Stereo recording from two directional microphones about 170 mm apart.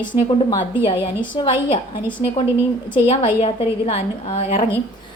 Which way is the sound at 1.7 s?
30° left (ahead or behind).